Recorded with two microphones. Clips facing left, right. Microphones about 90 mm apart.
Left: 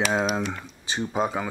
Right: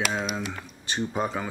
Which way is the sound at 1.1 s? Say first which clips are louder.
Left 5 dB; 15° left (ahead or behind).